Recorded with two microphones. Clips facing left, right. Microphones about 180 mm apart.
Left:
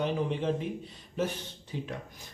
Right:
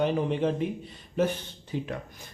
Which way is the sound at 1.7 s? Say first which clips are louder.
Right 5 dB; 60° right (ahead or behind).